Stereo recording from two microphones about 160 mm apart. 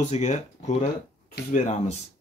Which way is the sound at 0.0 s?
45° left (ahead or behind).